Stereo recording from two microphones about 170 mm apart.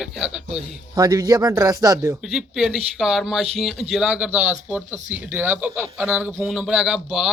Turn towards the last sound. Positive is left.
turn(degrees=0)  # may be behind; listen again after turning